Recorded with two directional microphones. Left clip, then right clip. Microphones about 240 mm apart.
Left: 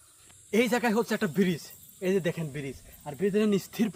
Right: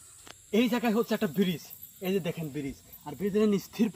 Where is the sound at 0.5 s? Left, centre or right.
Centre.